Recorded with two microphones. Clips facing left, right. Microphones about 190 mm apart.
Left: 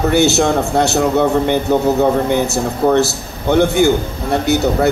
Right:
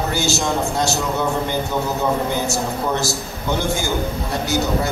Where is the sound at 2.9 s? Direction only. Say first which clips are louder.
Left 8 dB; 65° left (ahead or behind).